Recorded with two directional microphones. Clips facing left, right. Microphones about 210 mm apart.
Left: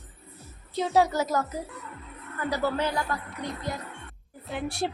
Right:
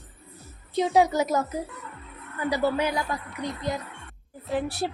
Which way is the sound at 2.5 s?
15° right (ahead or behind).